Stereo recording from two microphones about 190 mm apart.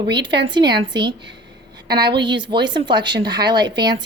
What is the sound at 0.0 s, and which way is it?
Speech, 25° right (ahead or behind).